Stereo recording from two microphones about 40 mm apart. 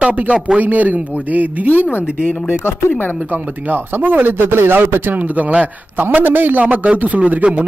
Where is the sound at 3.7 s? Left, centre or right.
Right.